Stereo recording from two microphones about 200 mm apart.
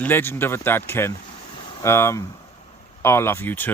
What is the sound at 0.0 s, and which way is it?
Speech, 10° left (ahead or behind).